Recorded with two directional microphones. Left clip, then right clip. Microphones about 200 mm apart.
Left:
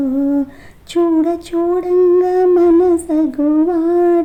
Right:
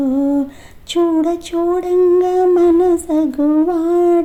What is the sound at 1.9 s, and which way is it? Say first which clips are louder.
Humming: left 1 dB; 25° right (ahead or behind).